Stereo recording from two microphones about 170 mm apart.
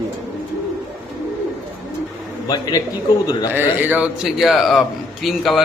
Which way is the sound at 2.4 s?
25° left (ahead or behind).